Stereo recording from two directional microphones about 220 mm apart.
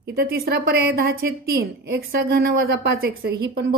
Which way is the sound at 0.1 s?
45° right (ahead or behind).